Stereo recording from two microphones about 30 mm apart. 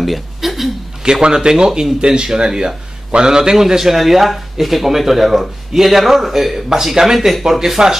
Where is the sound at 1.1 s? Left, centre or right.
Right.